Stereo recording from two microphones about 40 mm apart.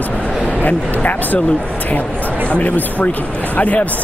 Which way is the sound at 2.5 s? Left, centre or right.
Left.